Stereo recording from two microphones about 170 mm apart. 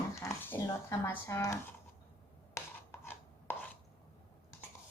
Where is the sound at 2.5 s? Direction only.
15° left (ahead or behind).